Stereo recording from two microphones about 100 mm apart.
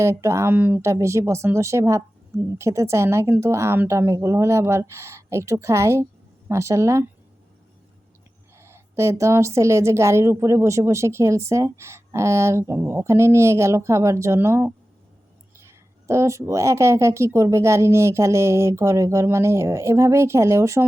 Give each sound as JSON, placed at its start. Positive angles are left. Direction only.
{"t": 0.0, "sound": "a woman's voice", "side_deg": -30}
{"t": 8.5, "sound": "a woman's voice", "side_deg": -25}
{"t": 16.0, "sound": "a woman's voice", "side_deg": -30}